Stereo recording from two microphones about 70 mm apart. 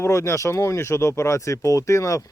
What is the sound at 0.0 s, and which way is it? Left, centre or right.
Speech, left.